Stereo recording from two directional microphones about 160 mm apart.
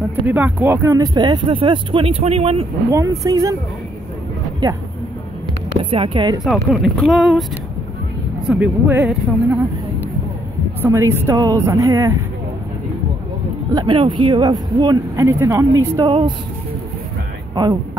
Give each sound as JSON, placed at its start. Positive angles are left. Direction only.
{"t": 0.3, "sound": "speech", "side_deg": -10}
{"t": 2.9, "sound": "speech", "side_deg": -20}
{"t": 4.6, "sound": "speech", "side_deg": -25}
{"t": 5.9, "sound": "speech", "side_deg": -35}
{"t": 6.4, "sound": "a woman's voice", "side_deg": 0}
{"t": 10.8, "sound": "a woman's voice", "side_deg": -15}
{"t": 13.7, "sound": "speech", "side_deg": -30}
{"t": 16.1, "sound": "speech", "side_deg": -30}